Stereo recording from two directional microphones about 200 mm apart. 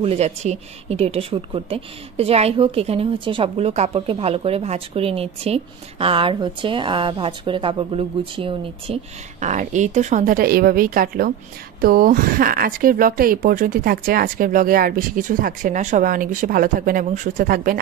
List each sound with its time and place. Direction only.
0.0 s speech: 30° right (ahead or behind)